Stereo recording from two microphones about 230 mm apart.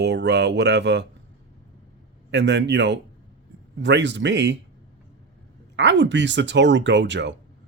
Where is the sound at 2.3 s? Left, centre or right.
Right.